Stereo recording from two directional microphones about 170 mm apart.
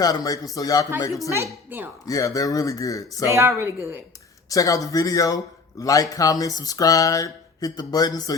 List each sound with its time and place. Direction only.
0.0 s speech: 20° left (ahead or behind)
1.7 s speech: 10° right (ahead or behind)
2.0 s speech: 20° left (ahead or behind)
3.2 s speech: 15° right (ahead or behind)
4.4 s speech: 20° left (ahead or behind)